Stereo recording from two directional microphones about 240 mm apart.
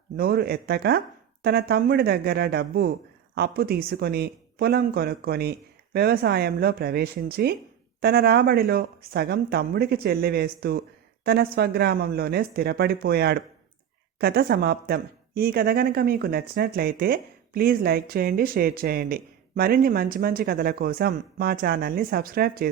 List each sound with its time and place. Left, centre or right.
0.2 s a woman's voice: right